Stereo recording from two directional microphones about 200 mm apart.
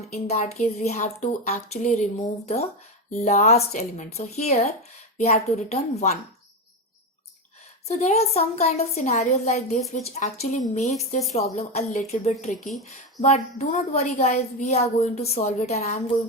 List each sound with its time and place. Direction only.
0.1 s speech: 35° left (ahead or behind)
7.9 s speech: 30° left (ahead or behind)